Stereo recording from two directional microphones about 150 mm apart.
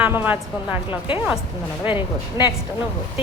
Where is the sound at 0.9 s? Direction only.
35° left (ahead or behind).